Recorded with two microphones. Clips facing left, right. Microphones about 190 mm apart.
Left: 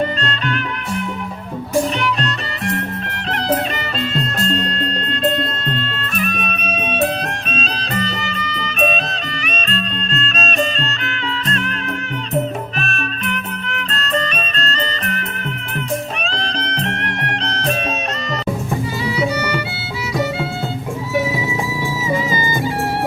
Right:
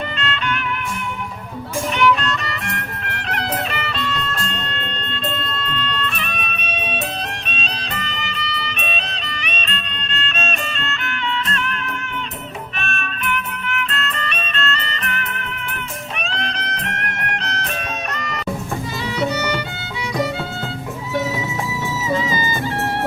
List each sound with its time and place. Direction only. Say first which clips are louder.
0.2 s music: left 2 dB; 40° left (ahead or behind)
1.7 s music: even; 35° left (ahead or behind)
5.7 s music: left 2 dB; 45° left (ahead or behind)
12.8 s music: left 2 dB; 35° left (ahead or behind)
19.1 s music: even; 10° left (ahead or behind)
22.1 s music: left 1 dB; 10° left (ahead or behind)